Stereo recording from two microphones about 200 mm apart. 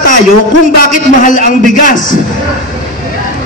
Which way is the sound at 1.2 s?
40° left (ahead or behind).